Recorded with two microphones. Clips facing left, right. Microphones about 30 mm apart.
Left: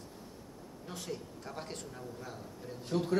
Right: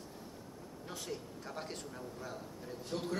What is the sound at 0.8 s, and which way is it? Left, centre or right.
Speech, centre.